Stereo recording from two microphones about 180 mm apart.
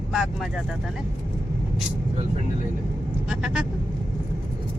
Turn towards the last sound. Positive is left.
turn(degrees=-5)  # may be behind; listen again after turning